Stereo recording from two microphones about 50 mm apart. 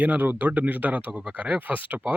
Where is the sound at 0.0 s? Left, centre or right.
Right.